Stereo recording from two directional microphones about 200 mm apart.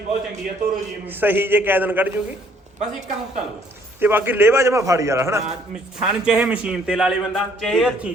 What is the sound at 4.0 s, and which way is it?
A man's voice, 10° right (ahead or behind).